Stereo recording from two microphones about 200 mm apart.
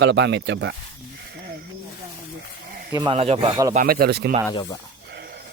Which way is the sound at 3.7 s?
45° right (ahead or behind).